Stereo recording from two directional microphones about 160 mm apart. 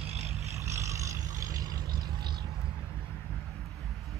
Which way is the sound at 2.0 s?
25° right (ahead or behind).